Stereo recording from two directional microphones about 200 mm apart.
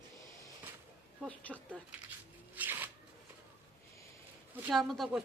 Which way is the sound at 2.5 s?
10° right (ahead or behind).